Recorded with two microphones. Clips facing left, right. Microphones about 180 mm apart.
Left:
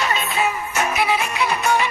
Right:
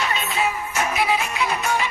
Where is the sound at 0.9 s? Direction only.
65° left (ahead or behind).